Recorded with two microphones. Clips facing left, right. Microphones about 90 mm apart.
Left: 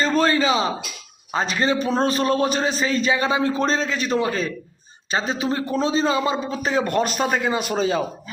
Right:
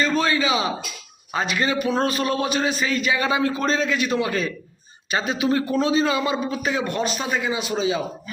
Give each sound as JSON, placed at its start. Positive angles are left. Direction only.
{"t": 0.0, "sound": "a man's voice", "side_deg": 40}
{"t": 6.8, "sound": "speech", "side_deg": 50}